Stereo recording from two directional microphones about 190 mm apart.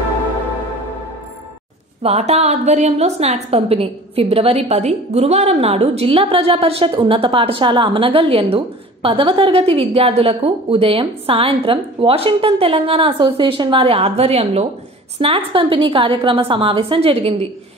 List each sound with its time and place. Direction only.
2.0 s a woman's voice: 35° right (ahead or behind)